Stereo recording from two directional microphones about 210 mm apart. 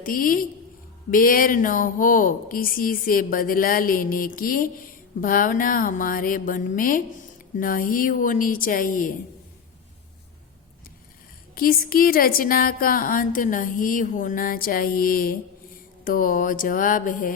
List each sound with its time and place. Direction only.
0.0 s a woman's voice: 40° left (ahead or behind)
11.5 s a woman's voice: 45° left (ahead or behind)